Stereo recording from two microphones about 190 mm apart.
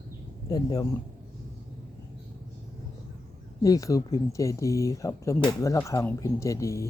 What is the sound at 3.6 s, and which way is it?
Speech, 15° left (ahead or behind).